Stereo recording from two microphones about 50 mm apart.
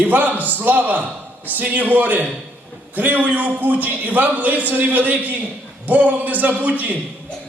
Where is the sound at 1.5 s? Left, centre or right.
Right.